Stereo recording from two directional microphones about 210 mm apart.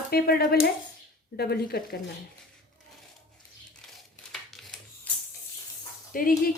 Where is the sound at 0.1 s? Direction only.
50° left (ahead or behind).